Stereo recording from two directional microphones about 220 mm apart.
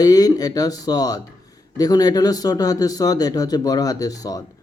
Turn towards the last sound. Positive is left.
turn(degrees=15)  # may be behind; listen again after turning